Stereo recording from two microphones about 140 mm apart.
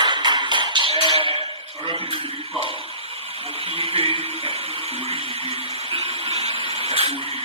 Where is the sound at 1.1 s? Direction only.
45° right (ahead or behind).